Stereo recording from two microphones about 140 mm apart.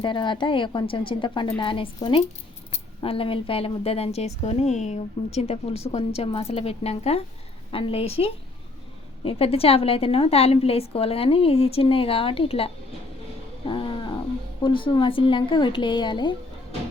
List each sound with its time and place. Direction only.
0.0 s a woman's voice: 35° left (ahead or behind)
13.7 s roaring cats: 35° left (ahead or behind)
14.6 s a woman's voice: 35° left (ahead or behind)